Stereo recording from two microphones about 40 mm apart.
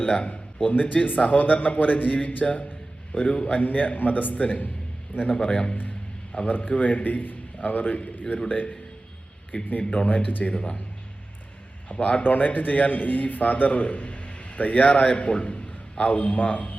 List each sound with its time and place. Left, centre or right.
0.0 s a man's voice: left
0.3 s a man's voice: left
2.0 s a man's voice: left
4.4 s a man's voice: left
6.5 s a man's voice: left
10.5 s a man's voice: left
11.9 s a man's voice: left
12.2 s a man's voice: left